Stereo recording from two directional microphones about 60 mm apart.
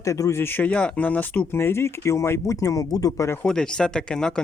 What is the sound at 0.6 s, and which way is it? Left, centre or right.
Speech, centre.